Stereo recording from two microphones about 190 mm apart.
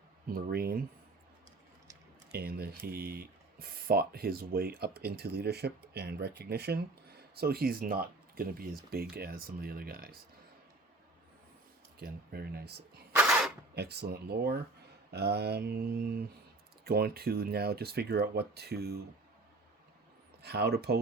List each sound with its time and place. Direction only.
0.3 s speech: 55° right (ahead or behind)
2.3 s speech: 55° right (ahead or behind)
11.9 s speech: 55° right (ahead or behind)
13.1 s a sound: 5° right (ahead or behind)
13.7 s speech: 60° right (ahead or behind)
20.4 s speech: 60° right (ahead or behind)